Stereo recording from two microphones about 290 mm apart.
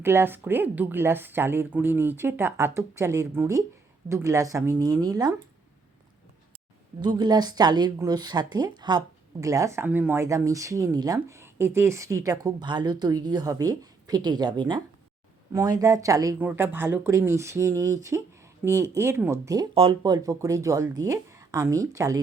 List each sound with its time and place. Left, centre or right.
0.0 s speech: centre
7.0 s speech: centre